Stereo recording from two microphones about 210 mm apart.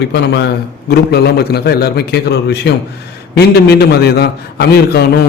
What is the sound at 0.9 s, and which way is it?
A man's voice, 50° left (ahead or behind).